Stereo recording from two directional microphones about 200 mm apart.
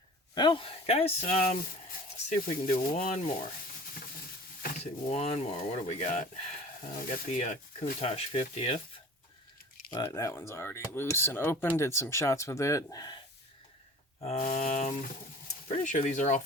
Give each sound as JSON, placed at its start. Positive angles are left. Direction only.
{"t": 0.3, "sound": "speech", "side_deg": 25}
{"t": 2.3, "sound": "speech", "side_deg": 45}
{"t": 4.6, "sound": "speech", "side_deg": 40}
{"t": 9.9, "sound": "speech", "side_deg": 15}
{"t": 14.3, "sound": "speech", "side_deg": 40}